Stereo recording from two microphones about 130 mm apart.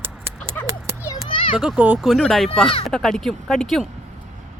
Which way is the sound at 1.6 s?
5° right (ahead or behind).